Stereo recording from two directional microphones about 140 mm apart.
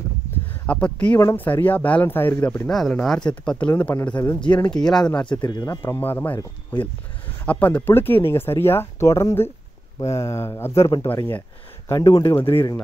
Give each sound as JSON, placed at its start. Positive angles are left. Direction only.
{"t": 0.7, "sound": "speech", "side_deg": 10}
{"t": 5.4, "sound": "speech", "side_deg": 30}
{"t": 5.9, "sound": "speech", "side_deg": 15}
{"t": 7.4, "sound": "speech", "side_deg": 10}
{"t": 12.4, "sound": "speech", "side_deg": 40}